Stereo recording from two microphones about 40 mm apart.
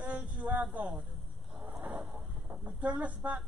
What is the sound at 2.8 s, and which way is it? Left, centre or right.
Speech, right.